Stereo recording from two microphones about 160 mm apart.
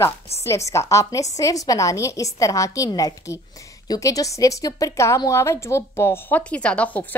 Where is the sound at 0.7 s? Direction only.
20° left (ahead or behind).